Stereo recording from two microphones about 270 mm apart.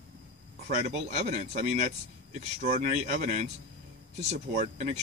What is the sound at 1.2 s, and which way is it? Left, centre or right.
Speech, right.